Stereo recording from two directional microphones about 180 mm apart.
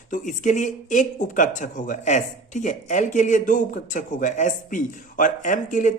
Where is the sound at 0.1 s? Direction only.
45° left (ahead or behind).